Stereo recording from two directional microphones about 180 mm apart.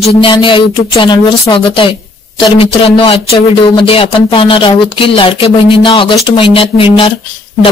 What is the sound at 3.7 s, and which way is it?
Speech, 30° left (ahead or behind).